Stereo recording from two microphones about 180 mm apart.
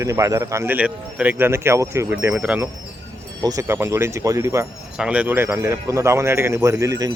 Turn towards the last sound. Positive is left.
turn(degrees=-20)  # may be behind; listen again after turning